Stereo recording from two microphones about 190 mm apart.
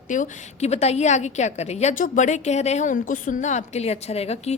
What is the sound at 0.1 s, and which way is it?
A woman's voice, 40° left (ahead or behind).